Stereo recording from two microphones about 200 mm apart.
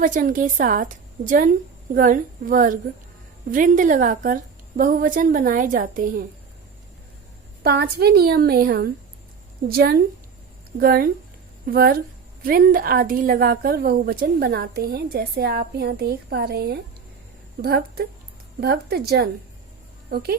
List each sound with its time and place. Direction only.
0.0 s a woman's voice: 40° right (ahead or behind)
7.6 s a woman's voice: 50° right (ahead or behind)